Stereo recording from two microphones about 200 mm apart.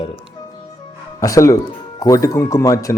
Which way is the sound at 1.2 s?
15° left (ahead or behind).